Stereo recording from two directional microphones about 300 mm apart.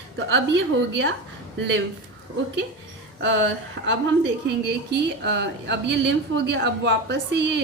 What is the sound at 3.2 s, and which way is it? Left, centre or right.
A woman's voice, right.